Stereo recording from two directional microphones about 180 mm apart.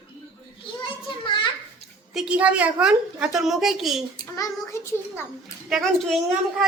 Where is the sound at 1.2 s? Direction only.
25° left (ahead or behind).